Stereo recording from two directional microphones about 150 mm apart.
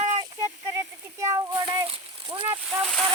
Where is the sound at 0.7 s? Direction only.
25° right (ahead or behind).